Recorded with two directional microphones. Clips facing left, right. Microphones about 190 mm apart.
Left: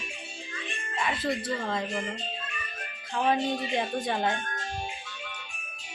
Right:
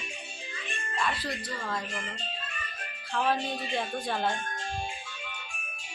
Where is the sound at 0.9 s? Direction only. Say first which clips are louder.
Left 3 dB; 20° left (ahead or behind).